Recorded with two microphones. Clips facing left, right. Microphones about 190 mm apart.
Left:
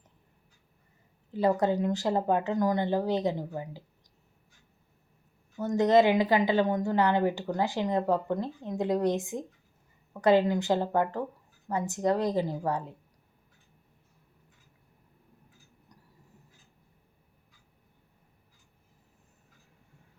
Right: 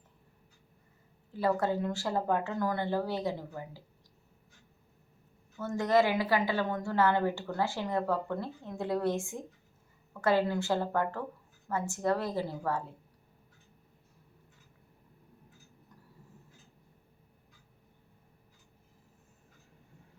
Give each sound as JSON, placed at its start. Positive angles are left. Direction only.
{"t": 1.3, "sound": "a woman's voice", "side_deg": 20}
{"t": 5.5, "sound": "a woman's voice", "side_deg": 20}